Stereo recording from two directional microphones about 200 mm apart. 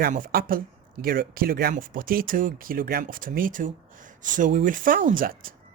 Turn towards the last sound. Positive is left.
turn(degrees=-40)  # may be behind; listen again after turning